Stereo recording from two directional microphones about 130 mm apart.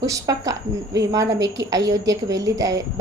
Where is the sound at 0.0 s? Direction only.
25° right (ahead or behind).